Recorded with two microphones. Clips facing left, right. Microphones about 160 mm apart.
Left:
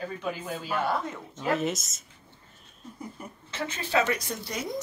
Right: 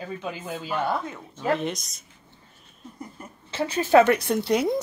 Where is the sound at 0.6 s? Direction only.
Centre (ahead or behind).